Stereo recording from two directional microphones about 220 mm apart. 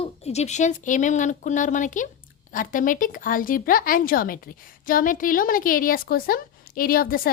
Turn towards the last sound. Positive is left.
turn(degrees=40)  # may be behind; listen again after turning